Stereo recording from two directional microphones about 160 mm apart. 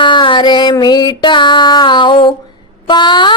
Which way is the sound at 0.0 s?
30° left (ahead or behind).